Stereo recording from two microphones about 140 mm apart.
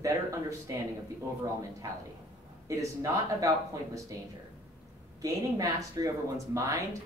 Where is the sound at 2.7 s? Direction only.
25° right (ahead or behind).